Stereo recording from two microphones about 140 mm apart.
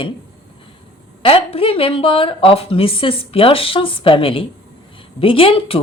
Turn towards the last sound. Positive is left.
turn(degrees=40)  # may be behind; listen again after turning